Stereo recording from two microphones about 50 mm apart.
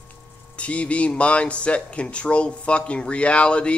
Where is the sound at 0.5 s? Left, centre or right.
Left.